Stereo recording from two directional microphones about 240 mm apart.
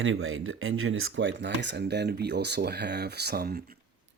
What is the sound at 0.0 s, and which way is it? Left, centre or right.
Speech, right.